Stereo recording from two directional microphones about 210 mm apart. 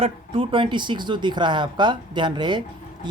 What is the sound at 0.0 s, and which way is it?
Speech, 25° right (ahead or behind).